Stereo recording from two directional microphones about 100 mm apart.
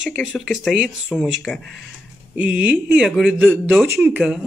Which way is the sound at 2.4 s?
15° right (ahead or behind).